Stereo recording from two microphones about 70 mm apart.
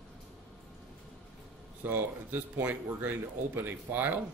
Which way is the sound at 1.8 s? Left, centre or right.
Right.